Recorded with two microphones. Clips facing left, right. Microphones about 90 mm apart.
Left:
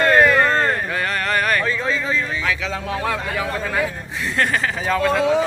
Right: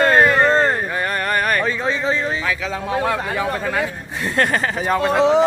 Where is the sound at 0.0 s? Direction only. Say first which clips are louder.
Right 1 dB; 25° right (ahead or behind).